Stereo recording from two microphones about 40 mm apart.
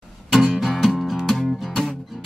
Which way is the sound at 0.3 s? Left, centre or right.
Centre.